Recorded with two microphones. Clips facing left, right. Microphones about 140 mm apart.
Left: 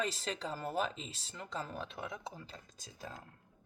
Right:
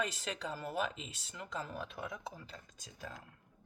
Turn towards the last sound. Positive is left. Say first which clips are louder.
# left 1 dB
turn(degrees=35)  # may be behind; listen again after turning